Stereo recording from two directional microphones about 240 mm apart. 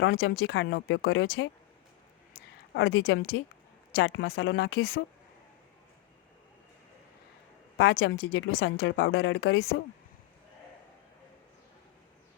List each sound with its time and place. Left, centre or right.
0.0 s speech: left
2.7 s speech: left
7.8 s speech: left